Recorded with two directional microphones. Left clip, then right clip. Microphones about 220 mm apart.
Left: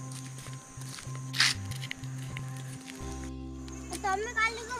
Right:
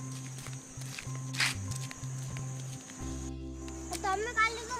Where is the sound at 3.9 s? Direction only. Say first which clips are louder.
Left 1 dB; centre (ahead or behind).